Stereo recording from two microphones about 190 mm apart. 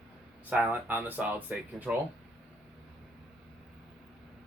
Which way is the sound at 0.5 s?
10° right (ahead or behind).